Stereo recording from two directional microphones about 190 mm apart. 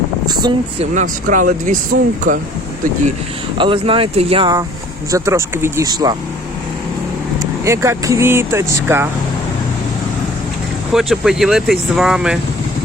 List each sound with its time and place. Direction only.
0.3 s speech: 25° right (ahead or behind)
0.9 s speech: 45° right (ahead or behind)
3.6 s speech: 25° right (ahead or behind)
7.6 s speech: 15° right (ahead or behind)
10.9 s speech: centre (ahead or behind)